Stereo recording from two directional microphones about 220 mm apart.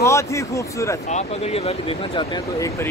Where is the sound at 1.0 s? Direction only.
30° left (ahead or behind).